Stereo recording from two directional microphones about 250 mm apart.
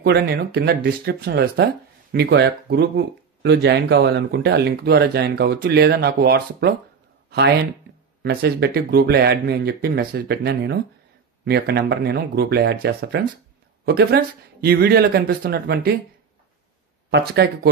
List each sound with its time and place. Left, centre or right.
0.0 s speech: right
17.1 s speech: right